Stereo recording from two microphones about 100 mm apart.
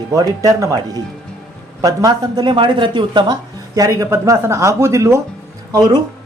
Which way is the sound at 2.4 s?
55° right (ahead or behind).